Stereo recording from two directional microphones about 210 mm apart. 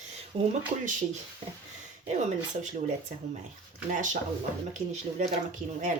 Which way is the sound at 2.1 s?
35° right (ahead or behind).